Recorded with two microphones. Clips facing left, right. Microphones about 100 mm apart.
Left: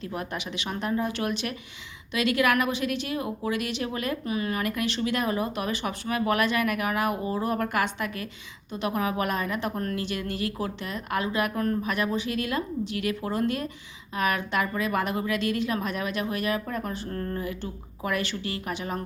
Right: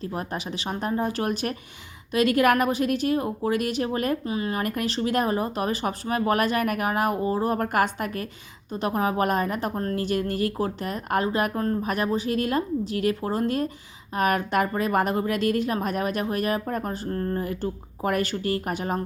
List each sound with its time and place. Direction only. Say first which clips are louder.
0.0 s a woman's voice: right 2 dB; 35° right (ahead or behind)
4.3 s speech: right 1 dB; 30° right (ahead or behind)
4.6 s a woman's voice: right 2 dB; 40° right (ahead or behind)